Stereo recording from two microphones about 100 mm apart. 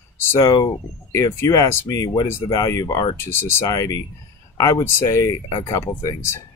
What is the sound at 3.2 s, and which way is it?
Speech, 25° left (ahead or behind).